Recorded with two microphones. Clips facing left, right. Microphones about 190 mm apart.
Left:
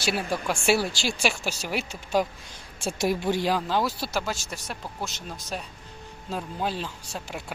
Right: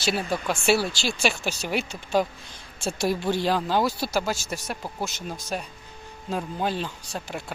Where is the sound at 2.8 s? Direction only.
15° left (ahead or behind).